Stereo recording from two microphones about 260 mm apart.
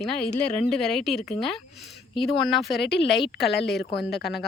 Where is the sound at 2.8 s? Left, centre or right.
Left.